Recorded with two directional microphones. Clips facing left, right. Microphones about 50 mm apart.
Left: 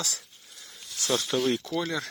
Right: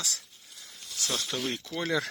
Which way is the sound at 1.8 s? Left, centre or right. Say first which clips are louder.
Right 2 dB; right.